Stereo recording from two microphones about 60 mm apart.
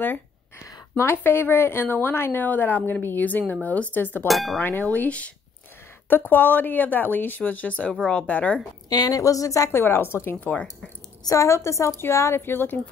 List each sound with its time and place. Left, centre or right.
0.9 s a woman's voice: left
4.3 s speech: centre
4.6 s speech: left
6.0 s a woman's voice: left
8.8 s a woman's voice: left
9.7 s a woman's voice: left
10.4 s speech: left
11.2 s a woman's voice: left